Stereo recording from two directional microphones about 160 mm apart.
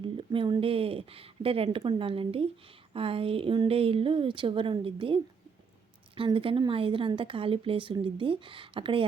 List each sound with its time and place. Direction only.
0.0 s a woman's voice: 30° right (ahead or behind)